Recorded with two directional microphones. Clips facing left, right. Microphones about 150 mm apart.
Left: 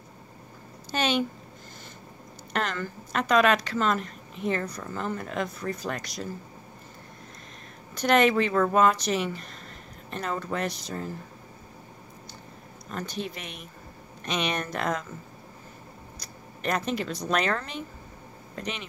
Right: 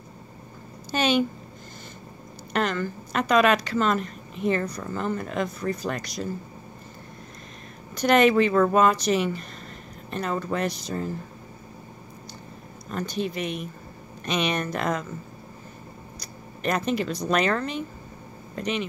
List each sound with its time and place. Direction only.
0.9 s a sound: 5° right (ahead or behind)
2.5 s speech: 5° right (ahead or behind)
7.9 s speech: centre (ahead or behind)
12.9 s speech: centre (ahead or behind)
16.6 s speech: 5° right (ahead or behind)